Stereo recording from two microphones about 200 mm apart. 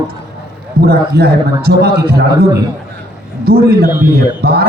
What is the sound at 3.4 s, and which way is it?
A man's voice, 50° right (ahead or behind).